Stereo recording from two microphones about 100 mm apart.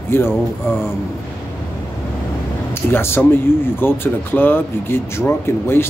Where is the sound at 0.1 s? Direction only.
25° left (ahead or behind).